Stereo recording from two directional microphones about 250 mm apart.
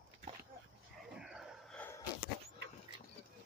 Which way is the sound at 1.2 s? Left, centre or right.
Centre.